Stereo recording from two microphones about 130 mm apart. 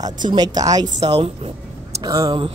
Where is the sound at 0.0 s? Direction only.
35° right (ahead or behind).